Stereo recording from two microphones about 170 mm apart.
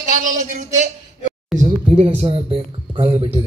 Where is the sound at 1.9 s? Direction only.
35° right (ahead or behind).